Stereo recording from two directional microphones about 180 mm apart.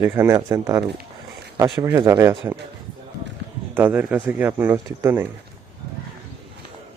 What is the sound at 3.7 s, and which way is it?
Speech, 10° right (ahead or behind).